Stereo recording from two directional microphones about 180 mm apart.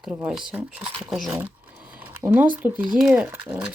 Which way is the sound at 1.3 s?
10° right (ahead or behind).